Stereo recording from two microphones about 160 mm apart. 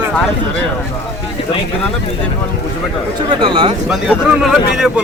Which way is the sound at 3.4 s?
30° right (ahead or behind).